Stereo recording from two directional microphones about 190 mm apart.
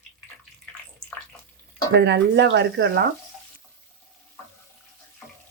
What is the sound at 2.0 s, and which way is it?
Speech, 65° right (ahead or behind).